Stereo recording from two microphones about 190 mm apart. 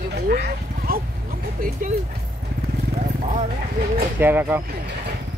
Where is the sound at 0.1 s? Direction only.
55° right (ahead or behind).